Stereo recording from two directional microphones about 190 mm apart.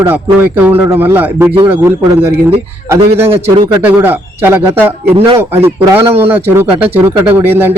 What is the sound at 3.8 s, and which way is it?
A man's voice, 10° right (ahead or behind).